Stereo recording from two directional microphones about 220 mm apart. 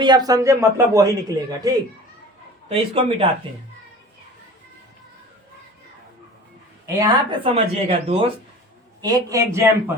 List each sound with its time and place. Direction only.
0.0 s a man's voice: 20° right (ahead or behind)
6.8 s a woman's voice: 20° right (ahead or behind)
9.0 s a man's voice: 15° right (ahead or behind)